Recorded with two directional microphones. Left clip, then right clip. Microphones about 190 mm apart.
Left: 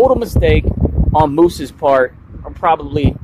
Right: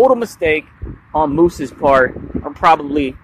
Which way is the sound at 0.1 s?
10° left (ahead or behind).